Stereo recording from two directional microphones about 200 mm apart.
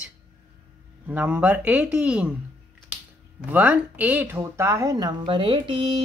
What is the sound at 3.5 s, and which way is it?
Speech, 5° right (ahead or behind).